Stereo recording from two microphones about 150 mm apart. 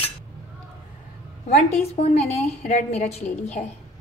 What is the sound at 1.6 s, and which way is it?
A woman's voice, 45° left (ahead or behind).